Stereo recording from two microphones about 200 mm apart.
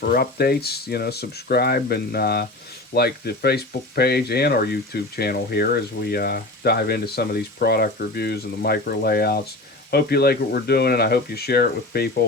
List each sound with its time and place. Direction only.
0.0 s speech: 50° left (ahead or behind)